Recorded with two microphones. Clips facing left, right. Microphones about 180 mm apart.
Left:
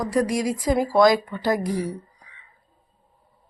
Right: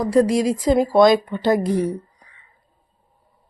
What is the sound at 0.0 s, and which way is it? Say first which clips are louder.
Speech: right 6 dB; 25° right (ahead or behind).